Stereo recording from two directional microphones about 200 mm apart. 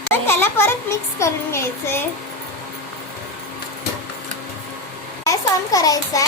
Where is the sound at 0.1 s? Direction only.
10° left (ahead or behind).